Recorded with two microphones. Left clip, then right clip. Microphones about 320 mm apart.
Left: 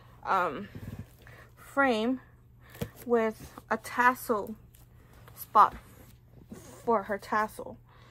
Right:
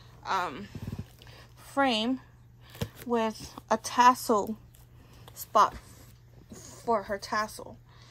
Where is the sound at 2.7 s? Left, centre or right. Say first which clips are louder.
Left 3 dB; centre.